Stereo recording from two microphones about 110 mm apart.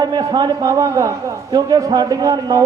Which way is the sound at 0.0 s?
35° right (ahead or behind).